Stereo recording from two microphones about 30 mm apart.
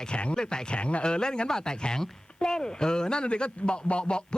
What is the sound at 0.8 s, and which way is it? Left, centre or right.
Speech, left.